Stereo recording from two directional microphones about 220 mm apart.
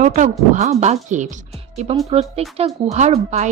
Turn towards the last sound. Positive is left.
turn(degrees=-30)  # may be behind; listen again after turning